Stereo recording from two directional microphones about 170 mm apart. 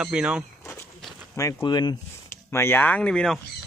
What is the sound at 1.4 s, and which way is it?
Speech, 20° left (ahead or behind).